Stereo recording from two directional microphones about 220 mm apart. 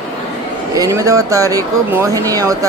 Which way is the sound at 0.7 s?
15° right (ahead or behind).